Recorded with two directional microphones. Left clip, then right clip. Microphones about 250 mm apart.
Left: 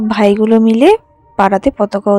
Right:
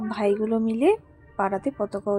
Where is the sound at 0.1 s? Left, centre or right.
Left.